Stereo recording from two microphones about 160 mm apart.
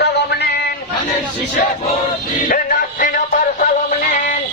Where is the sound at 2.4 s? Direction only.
60° left (ahead or behind).